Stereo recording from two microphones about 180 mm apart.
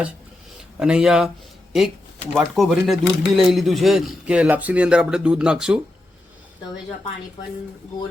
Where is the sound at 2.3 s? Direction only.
Centre (ahead or behind).